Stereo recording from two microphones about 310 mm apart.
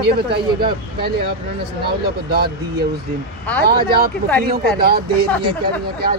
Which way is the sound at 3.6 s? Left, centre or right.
Right.